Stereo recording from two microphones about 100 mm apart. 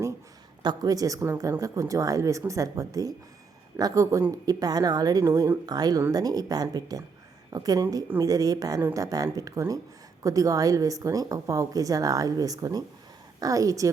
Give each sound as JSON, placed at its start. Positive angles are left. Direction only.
{"t": 0.6, "sound": "a woman's voice", "side_deg": -45}